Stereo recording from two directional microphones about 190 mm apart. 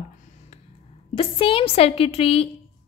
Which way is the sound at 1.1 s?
30° left (ahead or behind).